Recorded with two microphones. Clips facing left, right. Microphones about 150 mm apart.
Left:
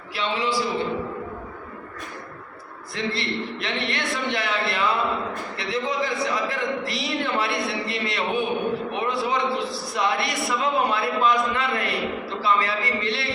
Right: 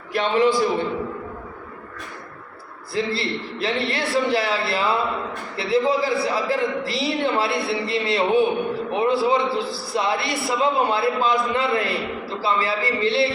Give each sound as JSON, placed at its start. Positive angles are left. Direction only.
{"t": 0.1, "sound": "a man's voice", "side_deg": -50}
{"t": 2.9, "sound": "a man's voice", "side_deg": -30}